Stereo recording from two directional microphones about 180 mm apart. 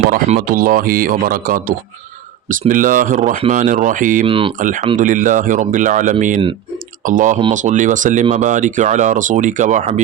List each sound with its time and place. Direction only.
0.3 s speech: 50° right (ahead or behind)
4.3 s speech: 30° right (ahead or behind)
4.6 s speech: 45° right (ahead or behind)